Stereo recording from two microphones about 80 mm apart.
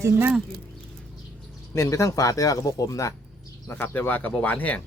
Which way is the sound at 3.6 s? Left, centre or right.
Left.